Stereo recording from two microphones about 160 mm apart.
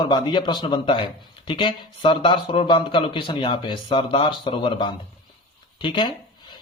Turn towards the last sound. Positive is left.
turn(degrees=30)  # may be behind; listen again after turning